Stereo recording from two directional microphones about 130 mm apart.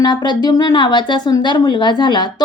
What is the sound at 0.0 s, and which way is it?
Speech, 35° left (ahead or behind).